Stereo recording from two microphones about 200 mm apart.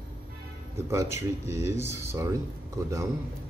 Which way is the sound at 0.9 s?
15° right (ahead or behind).